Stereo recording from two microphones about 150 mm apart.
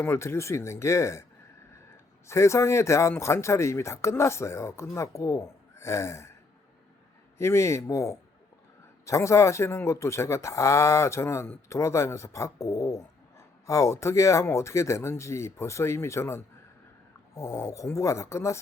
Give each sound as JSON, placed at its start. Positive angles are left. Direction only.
{"t": 0.0, "sound": "speech", "side_deg": 15}
{"t": 2.2, "sound": "speech", "side_deg": 20}
{"t": 7.3, "sound": "speech", "side_deg": 20}